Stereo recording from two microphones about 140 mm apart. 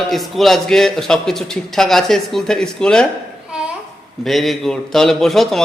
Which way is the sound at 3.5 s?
5° right (ahead or behind).